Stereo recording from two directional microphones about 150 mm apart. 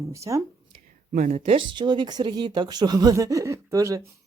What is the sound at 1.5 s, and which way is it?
Speech, 35° right (ahead or behind).